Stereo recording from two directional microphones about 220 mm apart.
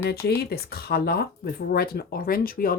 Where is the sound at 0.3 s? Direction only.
45° left (ahead or behind).